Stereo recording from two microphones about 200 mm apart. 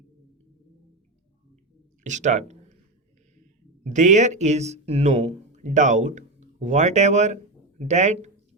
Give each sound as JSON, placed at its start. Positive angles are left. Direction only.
{"t": 2.0, "sound": "speech", "side_deg": -35}
{"t": 3.8, "sound": "speech", "side_deg": -35}